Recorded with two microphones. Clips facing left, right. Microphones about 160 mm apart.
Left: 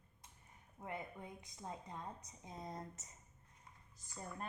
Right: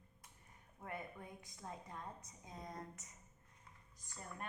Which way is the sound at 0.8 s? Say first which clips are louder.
Left 1 dB; 20° left (ahead or behind).